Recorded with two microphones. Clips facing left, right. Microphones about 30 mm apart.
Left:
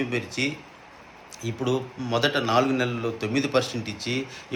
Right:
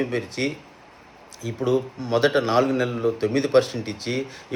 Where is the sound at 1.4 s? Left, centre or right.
Centre.